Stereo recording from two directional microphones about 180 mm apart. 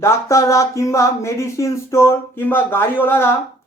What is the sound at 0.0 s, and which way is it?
Speech, 15° left (ahead or behind).